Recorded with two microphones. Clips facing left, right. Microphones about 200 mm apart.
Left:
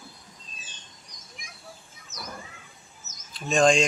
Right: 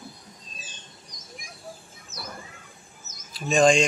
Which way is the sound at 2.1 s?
30° right (ahead or behind).